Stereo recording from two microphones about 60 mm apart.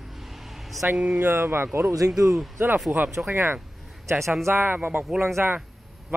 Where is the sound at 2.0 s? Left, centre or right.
Right.